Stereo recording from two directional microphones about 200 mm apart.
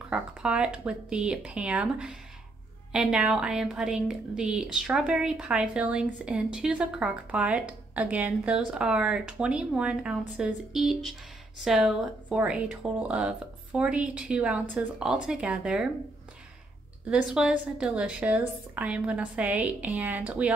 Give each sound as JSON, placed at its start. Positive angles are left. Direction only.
{"t": 0.1, "sound": "a woman's voice", "side_deg": -5}
{"t": 17.1, "sound": "a woman's voice", "side_deg": -5}